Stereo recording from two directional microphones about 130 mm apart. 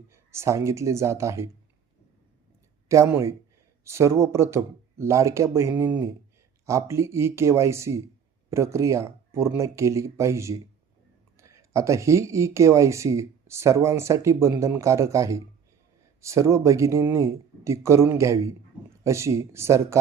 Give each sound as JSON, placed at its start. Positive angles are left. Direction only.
{"t": 0.1, "sound": "speech", "side_deg": -20}
{"t": 2.9, "sound": "speech", "side_deg": -20}